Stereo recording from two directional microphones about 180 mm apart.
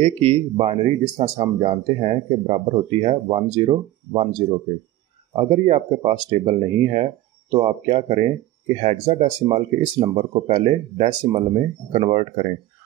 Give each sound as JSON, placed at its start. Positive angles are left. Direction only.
{"t": 0.0, "sound": "speech", "side_deg": -35}